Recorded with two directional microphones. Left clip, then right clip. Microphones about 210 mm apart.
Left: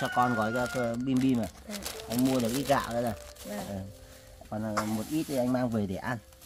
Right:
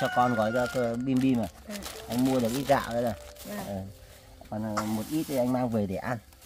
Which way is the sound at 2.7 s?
10° right (ahead or behind).